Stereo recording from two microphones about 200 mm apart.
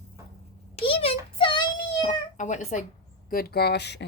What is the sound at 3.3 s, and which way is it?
Speech, 50° left (ahead or behind).